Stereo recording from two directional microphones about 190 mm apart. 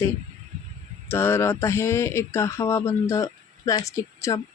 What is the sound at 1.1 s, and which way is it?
Speech, 10° left (ahead or behind).